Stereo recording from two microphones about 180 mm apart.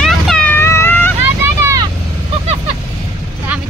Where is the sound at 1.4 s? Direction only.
15° right (ahead or behind).